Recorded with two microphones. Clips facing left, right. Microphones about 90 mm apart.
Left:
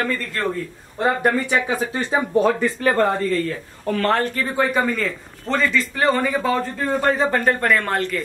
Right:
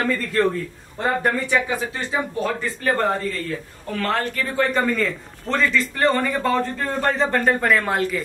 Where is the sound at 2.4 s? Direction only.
75° left (ahead or behind).